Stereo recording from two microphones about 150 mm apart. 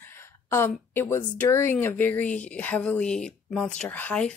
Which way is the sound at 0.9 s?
15° left (ahead or behind).